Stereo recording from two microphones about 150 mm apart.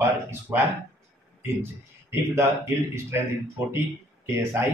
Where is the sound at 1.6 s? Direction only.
15° right (ahead or behind).